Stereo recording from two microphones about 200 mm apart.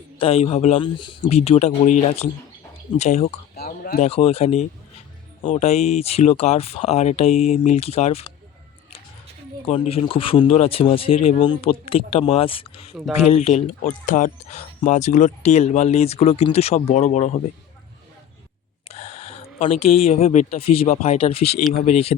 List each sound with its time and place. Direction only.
0.2 s speech: 30° left (ahead or behind)
1.4 s speech: 35° left (ahead or behind)
3.5 s a sound: 50° left (ahead or behind)
4.0 s speech: 30° left (ahead or behind)
9.6 s speech: 30° left (ahead or behind)
18.9 s speech: 30° left (ahead or behind)